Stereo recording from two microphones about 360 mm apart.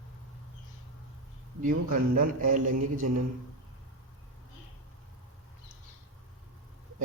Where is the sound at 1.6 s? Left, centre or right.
Right.